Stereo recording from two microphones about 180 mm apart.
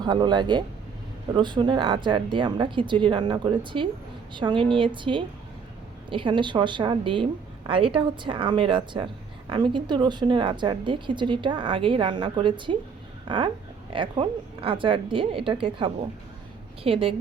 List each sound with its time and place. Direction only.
0.0 s a woman's voice: 25° right (ahead or behind)